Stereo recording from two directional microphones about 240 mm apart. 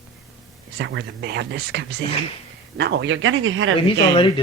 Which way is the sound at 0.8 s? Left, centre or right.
Right.